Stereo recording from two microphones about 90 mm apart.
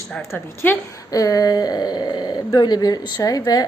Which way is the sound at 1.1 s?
40° left (ahead or behind).